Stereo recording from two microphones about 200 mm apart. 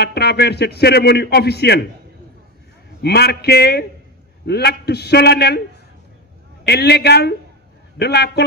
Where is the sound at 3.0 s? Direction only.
55° left (ahead or behind).